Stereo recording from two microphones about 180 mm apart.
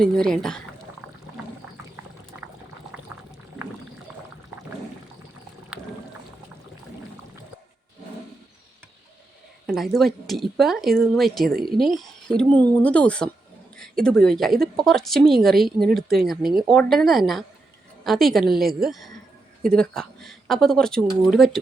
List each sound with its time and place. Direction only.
0.0 s speech: 5° left (ahead or behind)
9.6 s speech: centre (ahead or behind)